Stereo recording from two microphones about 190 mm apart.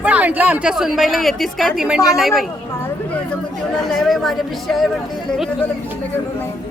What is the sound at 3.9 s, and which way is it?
Speech, centre (ahead or behind).